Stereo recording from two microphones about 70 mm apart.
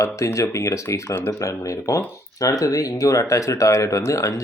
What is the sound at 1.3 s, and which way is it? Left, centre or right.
Speech, left.